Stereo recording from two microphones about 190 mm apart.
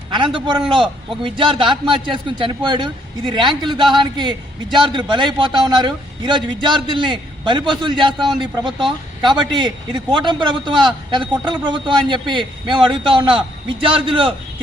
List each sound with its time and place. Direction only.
0.3 s a man's voice: 25° right (ahead or behind)